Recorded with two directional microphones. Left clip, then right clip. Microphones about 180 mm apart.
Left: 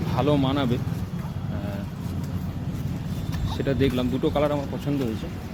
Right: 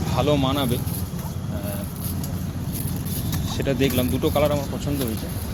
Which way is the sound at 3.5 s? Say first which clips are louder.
Right 2 dB; 15° left (ahead or behind).